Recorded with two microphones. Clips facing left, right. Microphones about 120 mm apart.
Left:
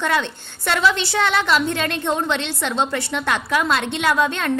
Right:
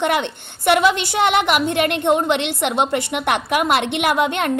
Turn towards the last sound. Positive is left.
turn(degrees=-20)  # may be behind; listen again after turning